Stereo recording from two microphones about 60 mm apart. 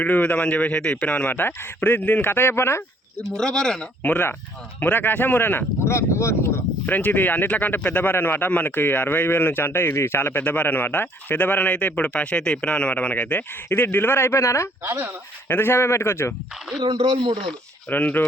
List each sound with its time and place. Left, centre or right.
0.0 s speech: left
1.4 s a man's voice: left
3.2 s speech: centre
4.0 s a man's voice: left
5.8 s speech: left
6.8 s a man's voice: left
13.7 s a man's voice: left
14.8 s speech: right
15.4 s speech: left
17.8 s speech: left